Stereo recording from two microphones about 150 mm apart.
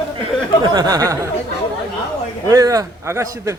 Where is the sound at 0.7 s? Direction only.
25° right (ahead or behind).